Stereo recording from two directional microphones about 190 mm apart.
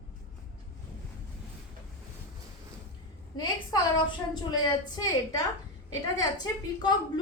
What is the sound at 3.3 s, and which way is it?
A woman's voice, 20° left (ahead or behind).